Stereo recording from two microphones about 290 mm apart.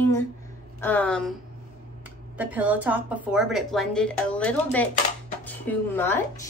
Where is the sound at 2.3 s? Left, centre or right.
Centre.